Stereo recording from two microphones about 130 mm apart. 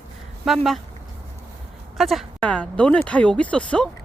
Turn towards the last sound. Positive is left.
turn(degrees=10)  # may be behind; listen again after turning